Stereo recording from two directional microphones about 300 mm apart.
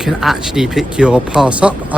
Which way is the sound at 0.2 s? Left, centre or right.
Centre.